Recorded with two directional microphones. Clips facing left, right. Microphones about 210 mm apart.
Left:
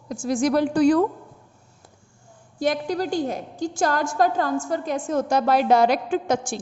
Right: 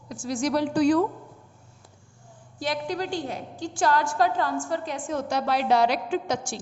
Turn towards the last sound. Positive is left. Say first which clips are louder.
# left 4 dB
turn(degrees=50)  # may be behind; listen again after turning